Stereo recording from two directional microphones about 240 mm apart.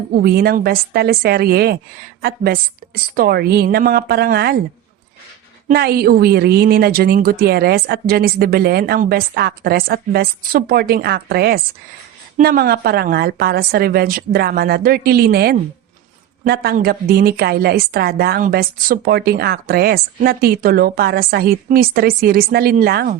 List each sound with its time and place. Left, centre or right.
0.2 s a woman's voice: right
5.6 s a woman's voice: right